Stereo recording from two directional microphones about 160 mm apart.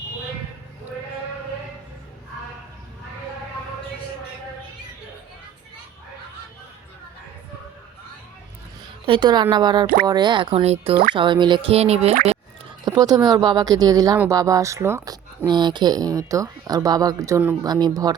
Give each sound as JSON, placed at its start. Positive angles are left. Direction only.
{"t": 9.0, "sound": "speech", "side_deg": -30}
{"t": 12.8, "sound": "speech", "side_deg": -25}